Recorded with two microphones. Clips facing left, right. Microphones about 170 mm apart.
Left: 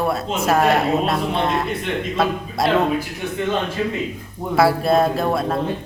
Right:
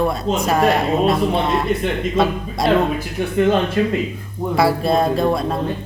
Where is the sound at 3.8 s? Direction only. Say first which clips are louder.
Right 5 dB; 70° right (ahead or behind).